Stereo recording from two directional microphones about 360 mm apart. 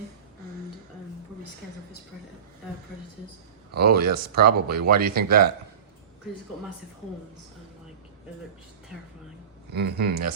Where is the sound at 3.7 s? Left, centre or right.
Right.